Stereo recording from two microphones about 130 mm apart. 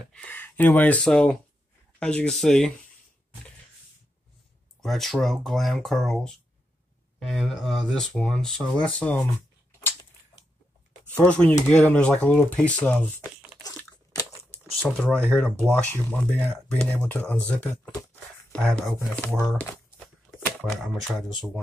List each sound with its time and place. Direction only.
0.0 s speech: 10° left (ahead or behind)
4.8 s speech: centre (ahead or behind)
9.7 s a sound: 20° left (ahead or behind)
11.1 s speech: 10° left (ahead or behind)
13.6 s crunch: 30° left (ahead or behind)
14.8 s speech: centre (ahead or behind)
18.9 s speech: 20° left (ahead or behind)
20.2 s shuffling cards: centre (ahead or behind)